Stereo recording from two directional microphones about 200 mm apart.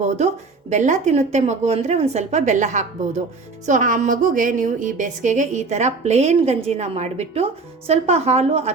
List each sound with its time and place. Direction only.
0.7 s a woman's voice: 35° right (ahead or behind)